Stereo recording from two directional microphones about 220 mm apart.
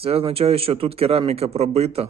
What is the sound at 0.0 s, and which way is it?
Speech, 25° right (ahead or behind).